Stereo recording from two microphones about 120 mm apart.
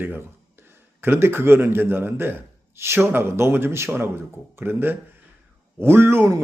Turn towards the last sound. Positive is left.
turn(degrees=-20)  # may be behind; listen again after turning